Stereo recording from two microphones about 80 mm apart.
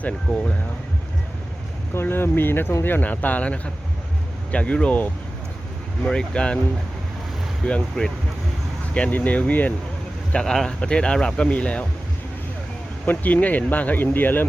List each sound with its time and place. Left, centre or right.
0.3 s speech: centre
1.9 s speech: left
6.1 s speech: centre
7.6 s speech: centre
10.3 s speech: centre
13.1 s speech: left